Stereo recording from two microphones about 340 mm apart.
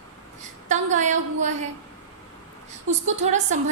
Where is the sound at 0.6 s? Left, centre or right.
Right.